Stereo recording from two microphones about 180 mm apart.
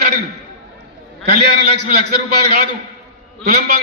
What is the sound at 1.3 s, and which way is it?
Speech, 40° right (ahead or behind).